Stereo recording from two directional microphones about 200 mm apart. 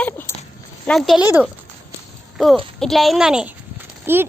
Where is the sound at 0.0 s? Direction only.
10° left (ahead or behind).